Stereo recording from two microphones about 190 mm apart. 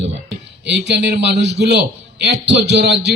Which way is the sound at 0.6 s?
65° right (ahead or behind).